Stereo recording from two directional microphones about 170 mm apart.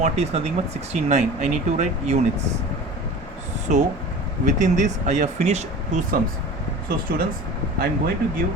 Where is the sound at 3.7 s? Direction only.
45° right (ahead or behind).